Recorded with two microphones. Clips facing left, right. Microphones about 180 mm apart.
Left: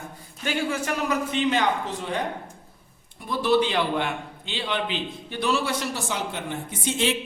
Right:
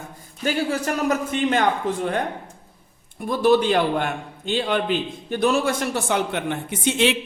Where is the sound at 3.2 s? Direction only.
50° right (ahead or behind).